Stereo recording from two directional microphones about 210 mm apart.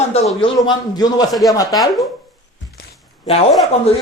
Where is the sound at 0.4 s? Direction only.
20° left (ahead or behind).